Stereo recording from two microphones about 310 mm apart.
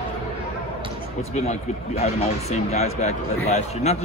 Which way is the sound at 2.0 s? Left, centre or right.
Left.